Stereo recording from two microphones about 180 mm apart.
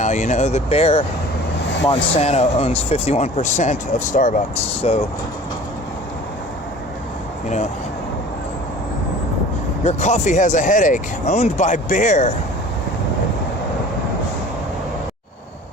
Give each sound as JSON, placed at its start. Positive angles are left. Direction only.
{"t": 0.0, "sound": "speech", "side_deg": 40}
{"t": 9.8, "sound": "speech", "side_deg": 40}